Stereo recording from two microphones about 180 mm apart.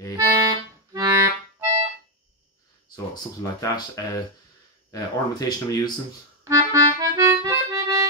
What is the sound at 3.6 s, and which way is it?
Speech, 15° left (ahead or behind).